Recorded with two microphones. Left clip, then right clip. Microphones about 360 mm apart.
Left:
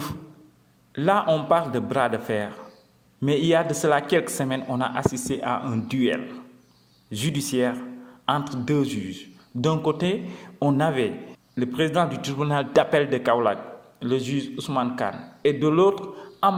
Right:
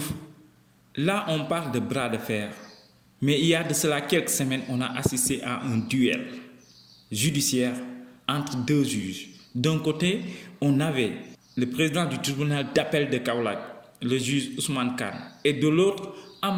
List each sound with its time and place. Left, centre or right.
0.9 s speech: centre